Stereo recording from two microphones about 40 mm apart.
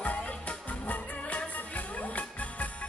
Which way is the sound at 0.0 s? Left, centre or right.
Left.